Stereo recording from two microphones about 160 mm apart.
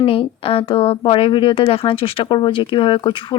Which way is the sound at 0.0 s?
35° left (ahead or behind).